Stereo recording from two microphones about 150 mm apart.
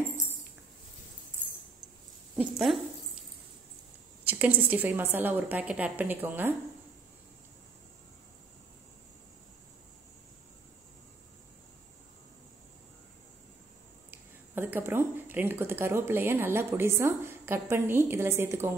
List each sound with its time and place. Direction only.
2.3 s speech: centre (ahead or behind)
4.3 s speech: 10° right (ahead or behind)
14.1 s speech: 15° right (ahead or behind)